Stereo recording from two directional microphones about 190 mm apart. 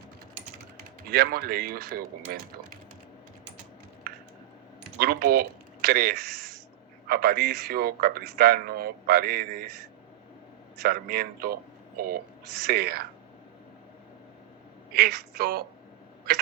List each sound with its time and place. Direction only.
1.1 s speech: 55° right (ahead or behind)
4.9 s speech: 55° right (ahead or behind)
14.9 s speech: 55° right (ahead or behind)